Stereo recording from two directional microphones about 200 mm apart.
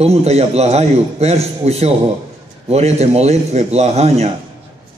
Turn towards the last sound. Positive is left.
turn(degrees=-30)  # may be behind; listen again after turning